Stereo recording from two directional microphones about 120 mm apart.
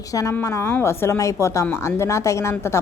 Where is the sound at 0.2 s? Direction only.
25° left (ahead or behind).